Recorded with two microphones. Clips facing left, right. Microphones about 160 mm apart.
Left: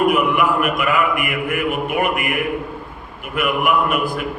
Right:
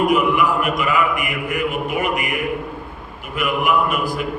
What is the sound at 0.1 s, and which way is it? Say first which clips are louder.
A man's voice: even; 55° left (ahead or behind).